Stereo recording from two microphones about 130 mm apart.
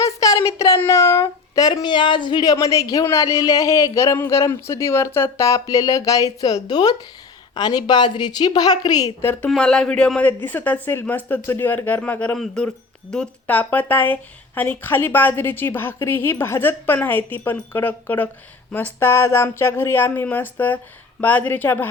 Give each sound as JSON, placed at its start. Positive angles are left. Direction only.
{"t": 0.0, "sound": "a sound", "side_deg": 25}
{"t": 0.4, "sound": "a woman's voice", "side_deg": 25}
{"t": 9.2, "sound": "speech", "side_deg": 20}
{"t": 9.5, "sound": "speech", "side_deg": 5}